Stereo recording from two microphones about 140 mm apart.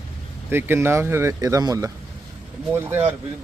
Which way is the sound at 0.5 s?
15° right (ahead or behind).